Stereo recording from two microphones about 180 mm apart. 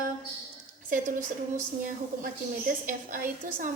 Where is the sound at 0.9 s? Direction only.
45° right (ahead or behind).